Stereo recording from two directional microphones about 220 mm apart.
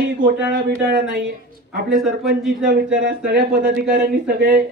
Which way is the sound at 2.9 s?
55° right (ahead or behind).